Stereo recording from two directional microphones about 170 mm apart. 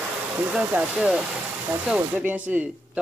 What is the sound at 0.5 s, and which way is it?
Speech, 5° right (ahead or behind).